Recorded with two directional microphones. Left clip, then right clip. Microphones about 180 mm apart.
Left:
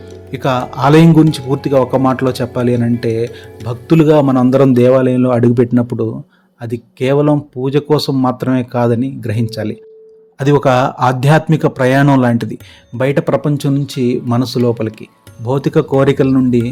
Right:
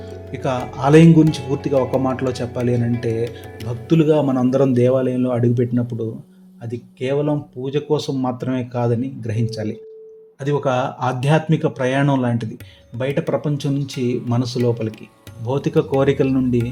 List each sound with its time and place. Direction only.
0.3 s speech: 20° left (ahead or behind)
10.3 s speech: 30° left (ahead or behind)